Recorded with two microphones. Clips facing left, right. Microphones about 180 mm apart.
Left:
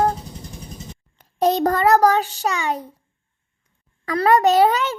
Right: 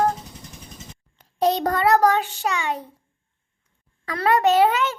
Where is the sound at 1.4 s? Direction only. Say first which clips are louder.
Left 3 dB; 45° left (ahead or behind).